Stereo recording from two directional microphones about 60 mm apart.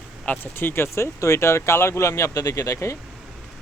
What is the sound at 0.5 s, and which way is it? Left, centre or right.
Speech, left.